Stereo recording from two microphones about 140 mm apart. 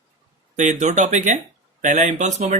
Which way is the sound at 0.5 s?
60° right (ahead or behind).